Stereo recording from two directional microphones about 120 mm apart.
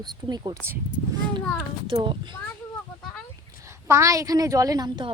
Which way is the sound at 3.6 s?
25° right (ahead or behind).